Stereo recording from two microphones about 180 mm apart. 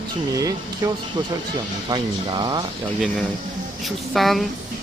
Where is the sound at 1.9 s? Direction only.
25° right (ahead or behind).